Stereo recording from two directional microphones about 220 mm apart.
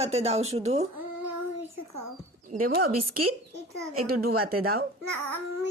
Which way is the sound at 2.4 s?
40° right (ahead or behind).